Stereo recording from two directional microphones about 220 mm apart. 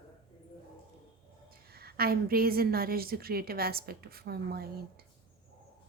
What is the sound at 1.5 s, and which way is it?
A woman's voice, 45° right (ahead or behind).